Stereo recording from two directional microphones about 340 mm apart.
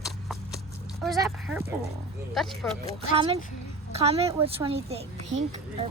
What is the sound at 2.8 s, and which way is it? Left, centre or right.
A woman's voice, centre.